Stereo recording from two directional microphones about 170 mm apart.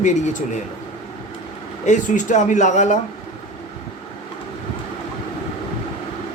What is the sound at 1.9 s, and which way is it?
Speech, 45° left (ahead or behind).